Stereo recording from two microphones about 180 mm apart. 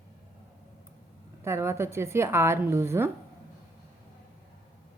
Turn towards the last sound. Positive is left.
turn(degrees=-15)  # may be behind; listen again after turning